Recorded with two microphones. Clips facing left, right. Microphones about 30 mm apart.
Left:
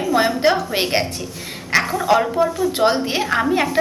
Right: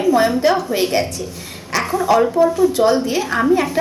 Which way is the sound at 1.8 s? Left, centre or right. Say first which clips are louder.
Right 3 dB; centre.